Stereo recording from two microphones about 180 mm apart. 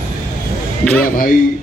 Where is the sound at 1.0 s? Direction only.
50° left (ahead or behind).